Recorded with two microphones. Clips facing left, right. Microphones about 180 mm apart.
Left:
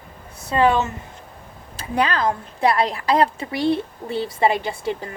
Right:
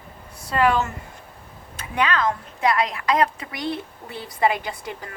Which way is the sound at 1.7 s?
35° left (ahead or behind).